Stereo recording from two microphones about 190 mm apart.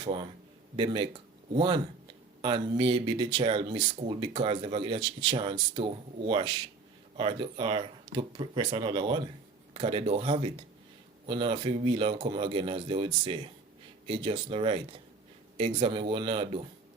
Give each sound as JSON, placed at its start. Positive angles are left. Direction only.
{"t": 0.0, "sound": "a man's voice", "side_deg": -25}